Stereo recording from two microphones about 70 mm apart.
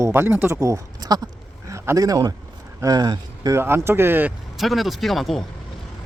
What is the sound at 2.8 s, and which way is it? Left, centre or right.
Speech, right.